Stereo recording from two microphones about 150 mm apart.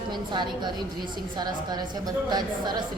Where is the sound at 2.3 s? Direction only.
30° right (ahead or behind).